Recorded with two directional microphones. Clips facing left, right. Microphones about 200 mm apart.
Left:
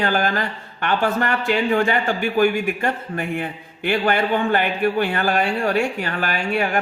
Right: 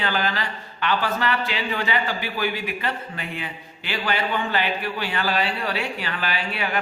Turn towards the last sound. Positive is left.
turn(degrees=45)  # may be behind; listen again after turning